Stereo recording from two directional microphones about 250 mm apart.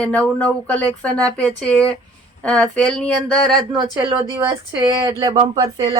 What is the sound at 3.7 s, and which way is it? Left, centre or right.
Speech, centre.